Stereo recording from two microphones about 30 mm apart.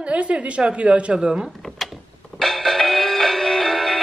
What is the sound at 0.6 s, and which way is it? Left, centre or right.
Speech, right.